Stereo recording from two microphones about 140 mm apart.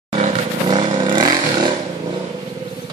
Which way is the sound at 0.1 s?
45° right (ahead or behind).